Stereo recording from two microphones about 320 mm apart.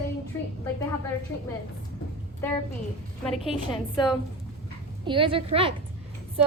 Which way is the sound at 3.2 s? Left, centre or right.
Centre.